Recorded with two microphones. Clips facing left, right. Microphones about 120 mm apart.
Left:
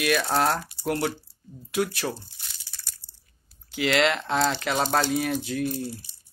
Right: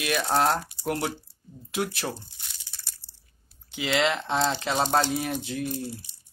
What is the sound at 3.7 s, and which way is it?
Speech, 20° right (ahead or behind).